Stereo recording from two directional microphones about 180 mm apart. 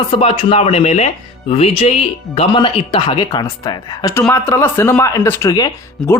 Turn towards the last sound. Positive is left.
turn(degrees=20)  # may be behind; listen again after turning